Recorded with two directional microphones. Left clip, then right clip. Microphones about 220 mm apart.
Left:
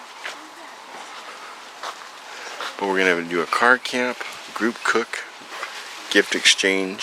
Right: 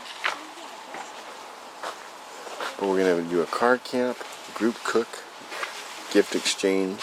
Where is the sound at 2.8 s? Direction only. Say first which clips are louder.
Left 3 dB; 25° left (ahead or behind).